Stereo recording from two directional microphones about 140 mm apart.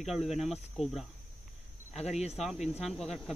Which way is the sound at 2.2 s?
50° left (ahead or behind).